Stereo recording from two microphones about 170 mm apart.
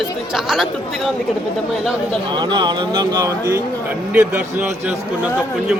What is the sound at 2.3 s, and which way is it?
Speech, 25° right (ahead or behind).